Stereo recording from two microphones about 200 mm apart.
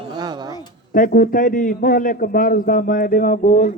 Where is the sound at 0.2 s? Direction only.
20° right (ahead or behind).